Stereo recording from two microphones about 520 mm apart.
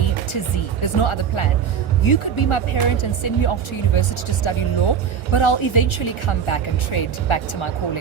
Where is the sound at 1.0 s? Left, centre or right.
Left.